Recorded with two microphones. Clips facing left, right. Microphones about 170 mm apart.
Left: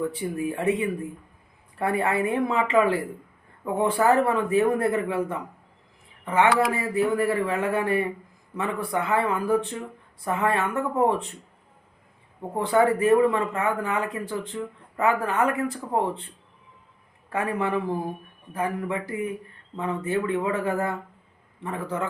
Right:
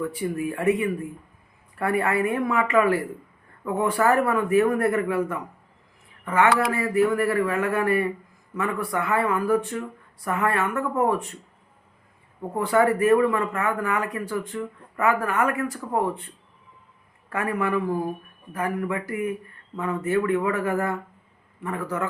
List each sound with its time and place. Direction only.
0.3 s speech: 20° left (ahead or behind)
12.4 s speech: 20° left (ahead or behind)
17.2 s speech: 20° left (ahead or behind)